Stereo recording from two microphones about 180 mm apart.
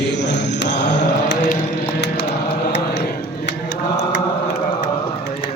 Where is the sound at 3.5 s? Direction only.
70° left (ahead or behind).